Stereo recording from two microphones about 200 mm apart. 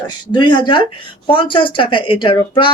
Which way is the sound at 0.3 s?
20° left (ahead or behind).